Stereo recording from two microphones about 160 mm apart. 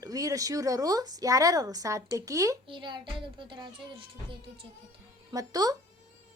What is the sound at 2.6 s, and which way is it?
Speech, 30° right (ahead or behind).